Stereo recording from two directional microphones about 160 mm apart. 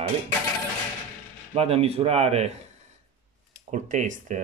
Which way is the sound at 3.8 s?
50° right (ahead or behind).